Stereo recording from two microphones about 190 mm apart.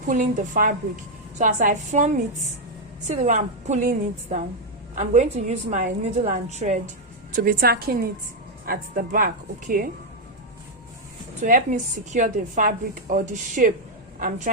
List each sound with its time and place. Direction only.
0.1 s a woman's voice: 45° right (ahead or behind)
7.3 s a woman's voice: 50° right (ahead or behind)
11.4 s a woman's voice: 45° right (ahead or behind)